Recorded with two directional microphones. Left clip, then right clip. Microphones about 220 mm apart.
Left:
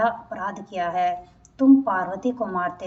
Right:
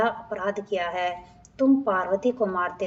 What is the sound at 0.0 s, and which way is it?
A woman's voice, 40° right (ahead or behind).